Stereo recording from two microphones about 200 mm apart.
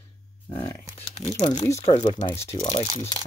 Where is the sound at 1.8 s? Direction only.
35° left (ahead or behind).